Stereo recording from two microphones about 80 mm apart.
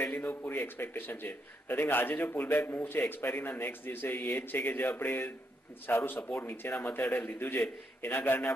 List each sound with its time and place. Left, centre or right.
0.0 s a man's voice: left